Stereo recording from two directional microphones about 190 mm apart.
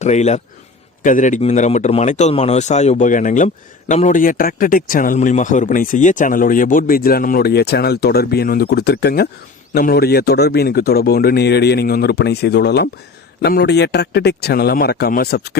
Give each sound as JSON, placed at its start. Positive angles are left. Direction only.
{"t": 0.0, "sound": "speech", "side_deg": 35}